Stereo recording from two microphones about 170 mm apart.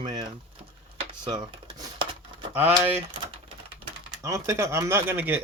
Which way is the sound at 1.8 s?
30° right (ahead or behind).